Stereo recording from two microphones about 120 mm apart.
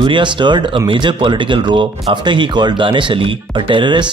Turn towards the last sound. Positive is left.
turn(degrees=-40)  # may be behind; listen again after turning